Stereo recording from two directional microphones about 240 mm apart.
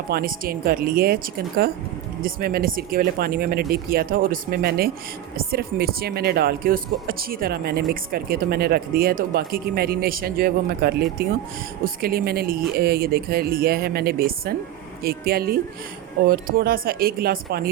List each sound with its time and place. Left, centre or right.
0.1 s speech: right